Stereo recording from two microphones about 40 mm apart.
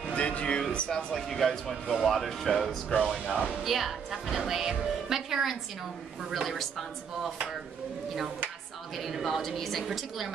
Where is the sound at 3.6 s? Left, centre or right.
Centre.